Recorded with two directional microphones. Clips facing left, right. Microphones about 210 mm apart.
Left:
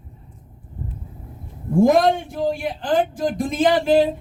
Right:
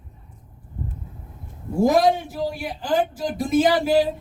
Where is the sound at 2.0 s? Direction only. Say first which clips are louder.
Left 1 dB; centre (ahead or behind).